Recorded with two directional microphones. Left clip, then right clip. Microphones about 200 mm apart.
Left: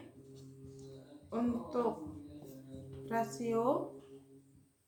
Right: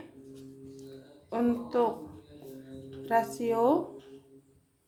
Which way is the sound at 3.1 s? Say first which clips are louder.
Right 8 dB; 55° right (ahead or behind).